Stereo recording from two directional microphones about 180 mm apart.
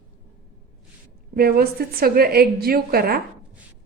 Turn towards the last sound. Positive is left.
turn(degrees=-55)  # may be behind; listen again after turning